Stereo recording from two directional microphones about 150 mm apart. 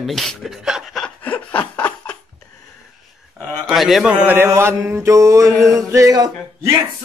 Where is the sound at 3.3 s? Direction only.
Centre (ahead or behind); by 5.5 s 20° right (ahead or behind).